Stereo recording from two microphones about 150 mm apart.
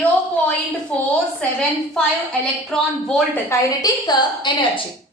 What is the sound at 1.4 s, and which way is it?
A woman's voice, 10° left (ahead or behind).